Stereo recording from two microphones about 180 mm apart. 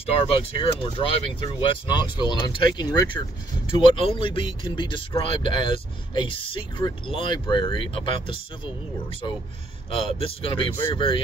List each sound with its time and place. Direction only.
0.1 s speech: 30° left (ahead or behind)
9.8 s speech: 30° left (ahead or behind)